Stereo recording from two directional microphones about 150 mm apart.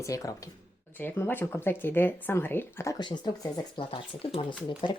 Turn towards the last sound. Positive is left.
turn(degrees=30)  # may be behind; listen again after turning